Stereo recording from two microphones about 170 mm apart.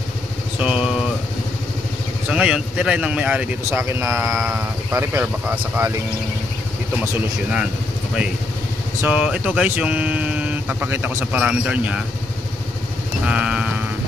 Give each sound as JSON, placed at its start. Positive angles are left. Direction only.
{"t": 0.6, "sound": "vehicle", "side_deg": -5}
{"t": 2.2, "sound": "a man's voice", "side_deg": -5}
{"t": 9.0, "sound": "speech", "side_deg": -10}
{"t": 13.2, "sound": "speech", "side_deg": -5}